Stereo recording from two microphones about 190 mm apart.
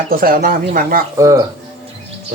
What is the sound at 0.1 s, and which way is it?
Speech, 50° right (ahead or behind).